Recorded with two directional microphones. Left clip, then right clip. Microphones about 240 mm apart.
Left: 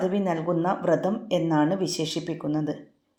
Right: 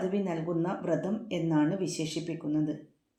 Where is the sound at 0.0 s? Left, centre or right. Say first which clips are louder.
Left 6 dB; centre.